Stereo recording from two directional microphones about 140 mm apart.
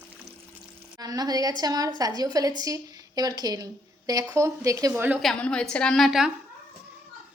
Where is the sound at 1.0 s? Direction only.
30° right (ahead or behind).